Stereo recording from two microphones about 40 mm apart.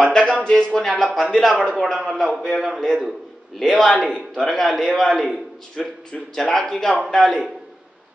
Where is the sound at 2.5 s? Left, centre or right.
Centre.